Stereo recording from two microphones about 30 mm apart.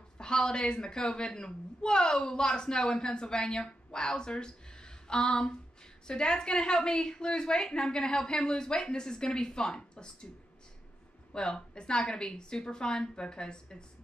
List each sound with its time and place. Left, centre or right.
0.2 s a woman's voice: left
11.3 s a woman's voice: left